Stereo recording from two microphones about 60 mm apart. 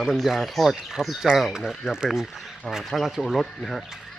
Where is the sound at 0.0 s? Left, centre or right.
Centre.